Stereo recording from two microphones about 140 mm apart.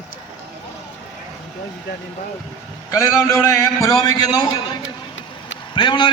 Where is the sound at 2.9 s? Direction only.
25° left (ahead or behind).